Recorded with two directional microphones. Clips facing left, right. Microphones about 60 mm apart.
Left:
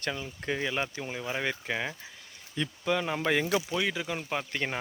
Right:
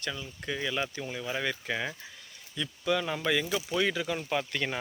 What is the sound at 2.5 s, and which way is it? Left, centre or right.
Speech, left.